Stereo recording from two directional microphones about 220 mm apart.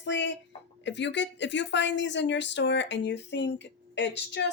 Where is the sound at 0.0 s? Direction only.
55° left (ahead or behind).